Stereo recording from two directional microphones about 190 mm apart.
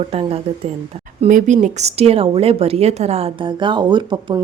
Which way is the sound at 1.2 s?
40° right (ahead or behind).